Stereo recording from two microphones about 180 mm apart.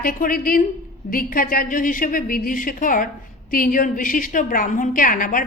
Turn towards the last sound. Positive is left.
turn(degrees=50)  # may be behind; listen again after turning